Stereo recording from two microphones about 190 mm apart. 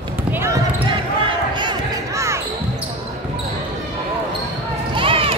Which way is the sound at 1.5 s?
25° right (ahead or behind).